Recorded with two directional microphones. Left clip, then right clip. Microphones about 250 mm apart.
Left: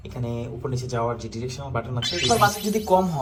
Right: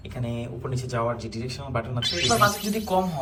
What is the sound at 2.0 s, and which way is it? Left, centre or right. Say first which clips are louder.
Speech: left 1 dB; centre.